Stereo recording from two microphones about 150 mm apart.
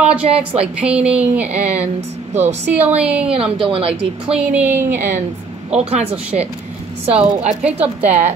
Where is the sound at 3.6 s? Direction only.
40° right (ahead or behind).